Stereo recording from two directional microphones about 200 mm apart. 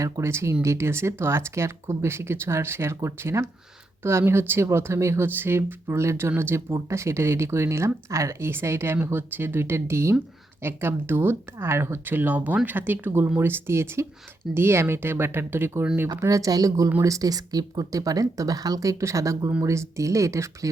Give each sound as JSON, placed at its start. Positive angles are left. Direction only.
{"t": 0.0, "sound": "speech", "side_deg": -15}